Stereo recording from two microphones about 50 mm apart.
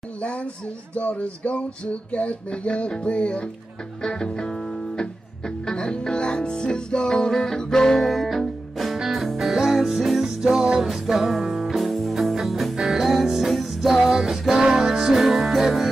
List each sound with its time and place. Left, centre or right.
0.2 s music: left; by 15.9 s centre